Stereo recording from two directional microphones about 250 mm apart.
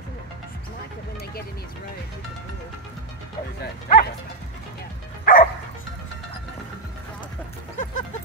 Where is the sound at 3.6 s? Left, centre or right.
Left.